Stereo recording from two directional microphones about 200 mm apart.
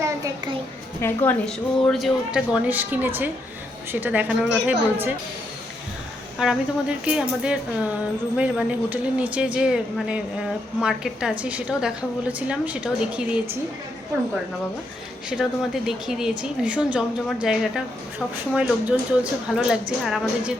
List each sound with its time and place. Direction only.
0.0 s a child's voice: 20° right (ahead or behind)
1.0 s a woman's voice: 10° left (ahead or behind); by 5.1 s 10° right (ahead or behind)
6.4 s a woman's voice: 5° right (ahead or behind)
15.3 s a woman's voice: 5° right (ahead or behind)